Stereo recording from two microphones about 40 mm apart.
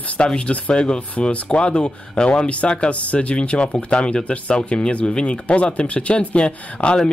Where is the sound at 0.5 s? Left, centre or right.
Left.